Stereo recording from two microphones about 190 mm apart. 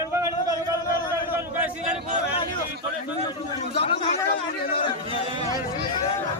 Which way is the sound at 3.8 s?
30° left (ahead or behind).